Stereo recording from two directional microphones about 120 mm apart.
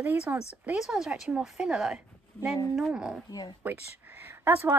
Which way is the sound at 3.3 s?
30° left (ahead or behind).